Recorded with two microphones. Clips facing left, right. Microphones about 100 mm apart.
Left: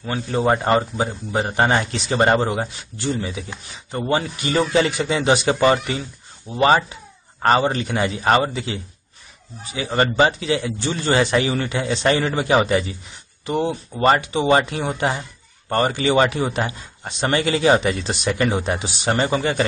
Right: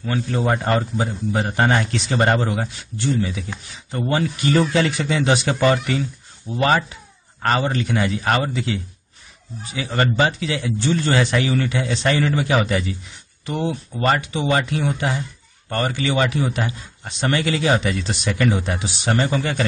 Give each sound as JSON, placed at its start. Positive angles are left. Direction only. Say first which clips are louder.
{"t": 0.0, "sound": "a man's voice", "louder": "left 1 dB", "side_deg": 20}
{"t": 12.0, "sound": "a man's voice", "louder": "left 1 dB", "side_deg": 25}